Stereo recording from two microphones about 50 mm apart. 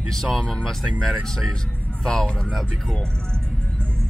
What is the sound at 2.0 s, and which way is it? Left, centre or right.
Speech, centre.